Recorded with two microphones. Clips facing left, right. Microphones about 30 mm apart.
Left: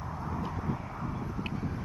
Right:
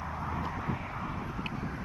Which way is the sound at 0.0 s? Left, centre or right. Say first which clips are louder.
Right 1 dB; right.